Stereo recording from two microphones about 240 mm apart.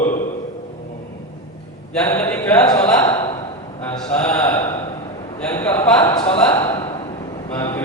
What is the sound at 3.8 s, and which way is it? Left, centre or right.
Mantra, centre.